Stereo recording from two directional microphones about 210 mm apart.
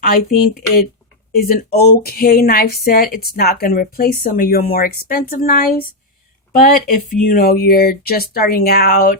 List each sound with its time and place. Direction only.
0.0 s speech: 45° left (ahead or behind)